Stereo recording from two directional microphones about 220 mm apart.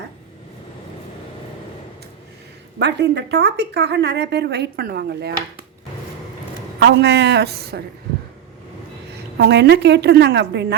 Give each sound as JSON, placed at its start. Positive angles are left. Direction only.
{"t": 2.7, "sound": "speech", "side_deg": -50}
{"t": 6.7, "sound": "speech", "side_deg": -50}
{"t": 9.4, "sound": "speech", "side_deg": -50}